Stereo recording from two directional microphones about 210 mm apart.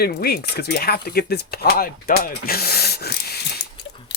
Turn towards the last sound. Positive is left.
turn(degrees=50)  # may be behind; listen again after turning